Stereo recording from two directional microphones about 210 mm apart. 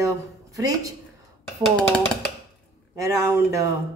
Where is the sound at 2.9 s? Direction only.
15° right (ahead or behind).